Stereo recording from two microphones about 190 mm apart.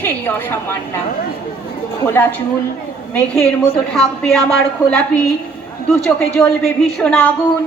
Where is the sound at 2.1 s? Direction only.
10° left (ahead or behind).